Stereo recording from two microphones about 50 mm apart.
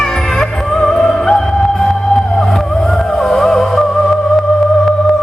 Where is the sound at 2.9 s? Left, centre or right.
Centre.